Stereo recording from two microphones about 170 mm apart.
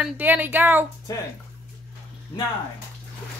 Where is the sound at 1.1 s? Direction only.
20° left (ahead or behind).